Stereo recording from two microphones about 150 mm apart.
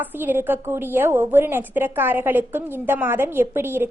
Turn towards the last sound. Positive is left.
turn(degrees=-15)  # may be behind; listen again after turning